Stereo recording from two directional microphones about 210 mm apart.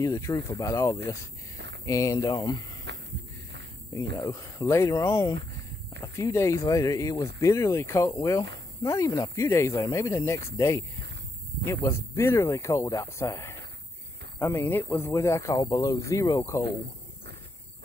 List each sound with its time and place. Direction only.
0.0 s speech: 15° left (ahead or behind)
4.2 s speech: 15° left (ahead or behind)